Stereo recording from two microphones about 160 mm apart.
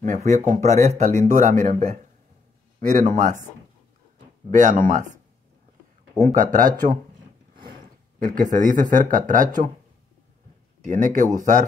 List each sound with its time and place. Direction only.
0.0 s speech: 50° right (ahead or behind)
4.5 s speech: 50° right (ahead or behind)
6.3 s speech: 55° right (ahead or behind)
7.5 s a sound: 65° right (ahead or behind)
8.9 s speech: 55° right (ahead or behind)
10.8 s speech: 55° right (ahead or behind)